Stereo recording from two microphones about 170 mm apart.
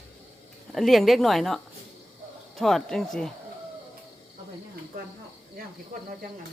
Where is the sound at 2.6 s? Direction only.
Centre (ahead or behind).